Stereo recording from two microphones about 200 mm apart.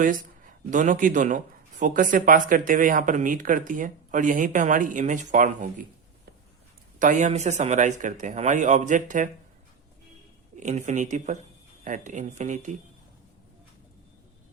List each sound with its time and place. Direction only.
0.0 s speech: 40° right (ahead or behind)
7.0 s speech: 40° right (ahead or behind)
10.6 s speech: 35° right (ahead or behind)